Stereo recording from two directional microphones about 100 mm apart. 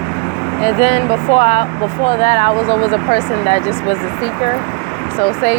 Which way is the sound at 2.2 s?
75° left (ahead or behind).